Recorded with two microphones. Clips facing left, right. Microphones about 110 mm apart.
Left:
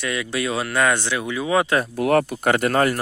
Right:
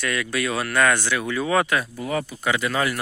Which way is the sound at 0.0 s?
20° left (ahead or behind).